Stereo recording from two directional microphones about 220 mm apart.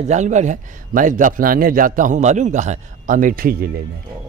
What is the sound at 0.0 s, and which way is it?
Speech, 30° right (ahead or behind).